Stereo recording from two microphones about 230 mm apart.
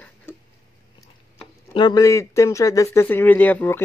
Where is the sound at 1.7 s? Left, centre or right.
Centre.